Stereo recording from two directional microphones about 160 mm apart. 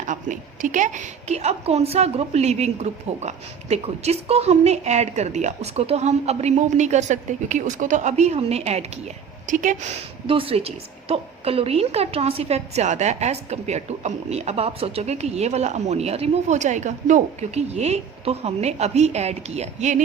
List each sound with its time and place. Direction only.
0.0 s a woman's voice: 50° right (ahead or behind)
10.2 s a woman's voice: 35° right (ahead or behind)